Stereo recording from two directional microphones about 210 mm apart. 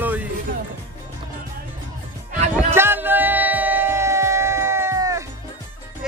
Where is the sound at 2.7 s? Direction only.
10° right (ahead or behind).